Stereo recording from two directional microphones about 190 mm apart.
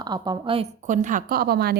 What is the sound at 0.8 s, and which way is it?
Speech, 40° right (ahead or behind).